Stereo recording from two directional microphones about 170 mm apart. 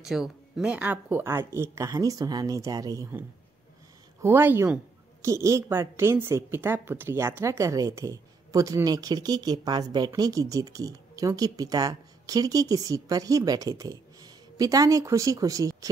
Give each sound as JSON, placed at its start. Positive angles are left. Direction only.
{"t": 0.1, "sound": "a woman's voice", "side_deg": -5}